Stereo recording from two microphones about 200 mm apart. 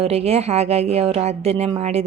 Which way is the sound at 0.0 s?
30° right (ahead or behind).